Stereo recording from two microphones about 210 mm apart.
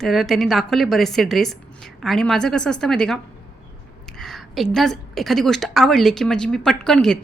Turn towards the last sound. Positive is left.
turn(degrees=0)  # may be behind; listen again after turning